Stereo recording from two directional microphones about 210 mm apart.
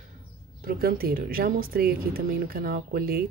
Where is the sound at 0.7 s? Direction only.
45° right (ahead or behind).